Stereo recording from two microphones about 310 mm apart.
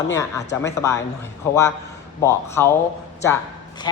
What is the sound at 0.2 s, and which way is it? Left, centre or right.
A man's voice, centre.